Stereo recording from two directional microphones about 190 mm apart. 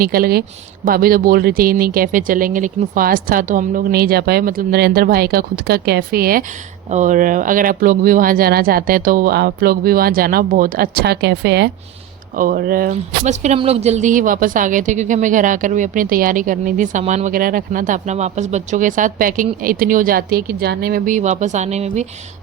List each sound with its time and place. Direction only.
0.0 s a woman's voice: 50° right (ahead or behind)
12.4 s a woman's voice: 50° right (ahead or behind)
12.9 s a woman's voice: 40° right (ahead or behind)